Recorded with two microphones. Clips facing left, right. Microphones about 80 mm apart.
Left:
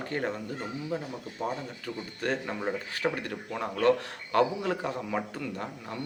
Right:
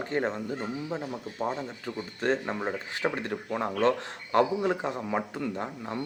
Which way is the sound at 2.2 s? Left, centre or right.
Right.